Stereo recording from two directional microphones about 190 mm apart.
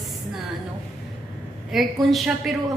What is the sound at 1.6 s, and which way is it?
Speech, centre (ahead or behind).